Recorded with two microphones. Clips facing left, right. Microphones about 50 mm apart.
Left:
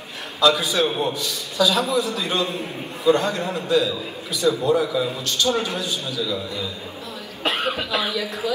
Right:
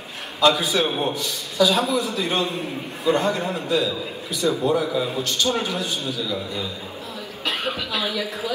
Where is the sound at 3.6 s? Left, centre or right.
Left.